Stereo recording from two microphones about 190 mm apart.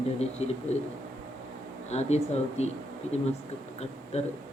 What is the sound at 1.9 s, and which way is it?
Speech, 35° left (ahead or behind).